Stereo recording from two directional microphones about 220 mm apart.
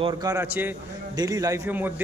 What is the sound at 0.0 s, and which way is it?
A man's voice, 15° right (ahead or behind).